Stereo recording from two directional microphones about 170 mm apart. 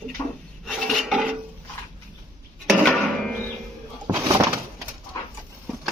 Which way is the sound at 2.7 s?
5° left (ahead or behind).